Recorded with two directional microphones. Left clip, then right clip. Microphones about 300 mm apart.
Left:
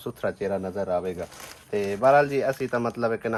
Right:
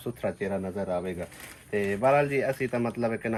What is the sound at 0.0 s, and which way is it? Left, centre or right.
Speech, centre.